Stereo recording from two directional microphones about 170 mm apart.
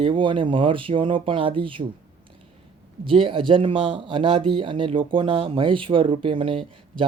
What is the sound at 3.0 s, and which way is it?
Speech, 30° right (ahead or behind).